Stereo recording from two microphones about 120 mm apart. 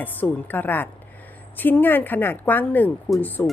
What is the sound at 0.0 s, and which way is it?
Speech, 15° left (ahead or behind).